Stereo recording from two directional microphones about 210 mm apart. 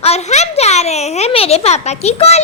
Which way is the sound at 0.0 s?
30° left (ahead or behind).